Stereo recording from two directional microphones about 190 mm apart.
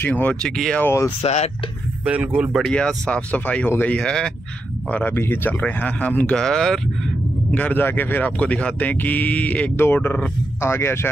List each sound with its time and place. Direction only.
0.0 s speech: 10° left (ahead or behind)
1.2 s speech: 35° left (ahead or behind)
2.0 s speech: 10° right (ahead or behind); by 11.1 s 15° left (ahead or behind)